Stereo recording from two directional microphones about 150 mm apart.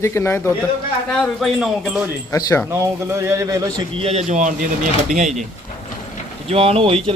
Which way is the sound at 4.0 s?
45° right (ahead or behind).